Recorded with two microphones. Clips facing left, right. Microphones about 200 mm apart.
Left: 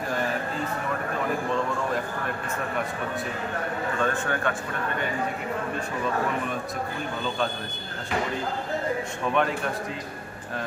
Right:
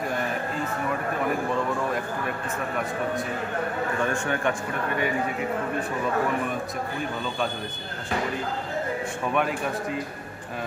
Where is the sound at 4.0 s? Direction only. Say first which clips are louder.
Even; 15° right (ahead or behind).